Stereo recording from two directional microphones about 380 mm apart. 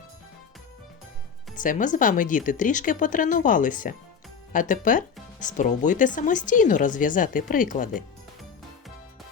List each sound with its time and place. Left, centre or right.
1.5 s speech: left